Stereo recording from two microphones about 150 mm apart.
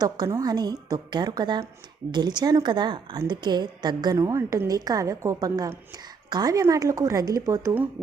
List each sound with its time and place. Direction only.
0.0 s a woman's voice: 25° right (ahead or behind)